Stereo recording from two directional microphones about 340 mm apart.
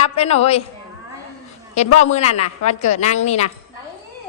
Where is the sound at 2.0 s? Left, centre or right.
Centre.